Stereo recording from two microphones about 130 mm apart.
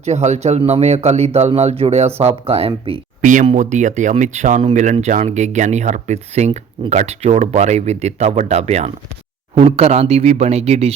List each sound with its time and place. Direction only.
0.0 s speech: 60° right (ahead or behind)
3.2 s speech: 80° right; by 10.9 s 55° right (ahead or behind)